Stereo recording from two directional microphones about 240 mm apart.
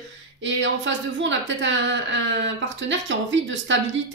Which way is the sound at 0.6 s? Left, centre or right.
Right.